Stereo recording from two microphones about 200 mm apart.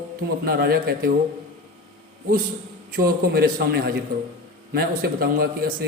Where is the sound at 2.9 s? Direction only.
50° right (ahead or behind).